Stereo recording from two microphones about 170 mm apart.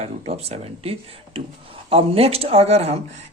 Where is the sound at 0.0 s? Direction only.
35° right (ahead or behind).